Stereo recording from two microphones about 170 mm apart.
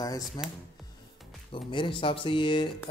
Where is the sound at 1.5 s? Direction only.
30° left (ahead or behind).